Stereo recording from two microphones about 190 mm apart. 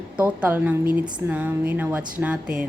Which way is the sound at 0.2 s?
10° right (ahead or behind).